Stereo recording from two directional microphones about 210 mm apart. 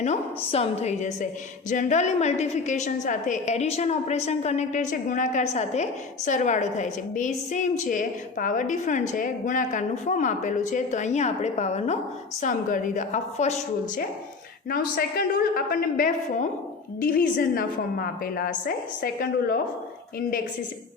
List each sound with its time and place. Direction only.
0.0 s a woman's voice: 30° left (ahead or behind)